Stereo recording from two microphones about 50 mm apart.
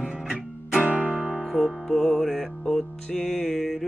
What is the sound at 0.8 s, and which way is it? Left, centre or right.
Music, right.